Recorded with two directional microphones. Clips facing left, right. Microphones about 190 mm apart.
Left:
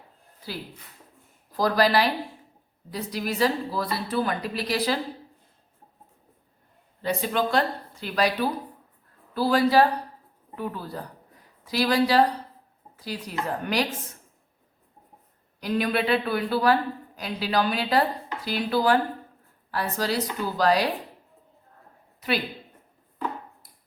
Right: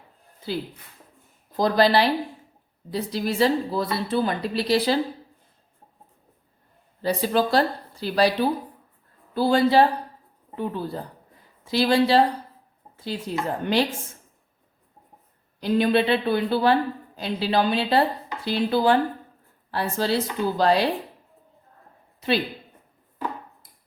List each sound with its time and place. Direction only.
0.4 s a woman's voice: 25° right (ahead or behind)
7.0 s a woman's voice: 35° right (ahead or behind)
15.6 s a woman's voice: 25° right (ahead or behind)